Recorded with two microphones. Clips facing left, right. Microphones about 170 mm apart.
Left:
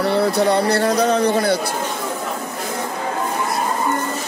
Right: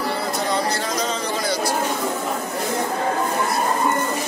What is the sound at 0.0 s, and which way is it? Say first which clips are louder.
Speech: left 8 dB; 65° left (ahead or behind).